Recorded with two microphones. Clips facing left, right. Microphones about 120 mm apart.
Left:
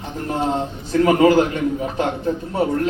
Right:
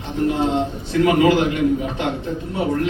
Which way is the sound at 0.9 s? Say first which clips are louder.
Left 2 dB; 40° left (ahead or behind).